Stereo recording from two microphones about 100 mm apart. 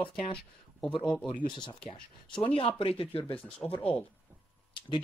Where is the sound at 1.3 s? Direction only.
50° left (ahead or behind).